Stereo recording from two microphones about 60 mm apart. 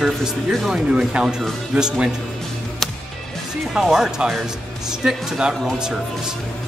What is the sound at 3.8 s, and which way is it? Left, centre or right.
Speech, centre.